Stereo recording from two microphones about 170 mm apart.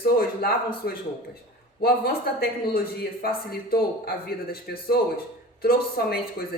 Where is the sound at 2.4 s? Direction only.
60° left (ahead or behind).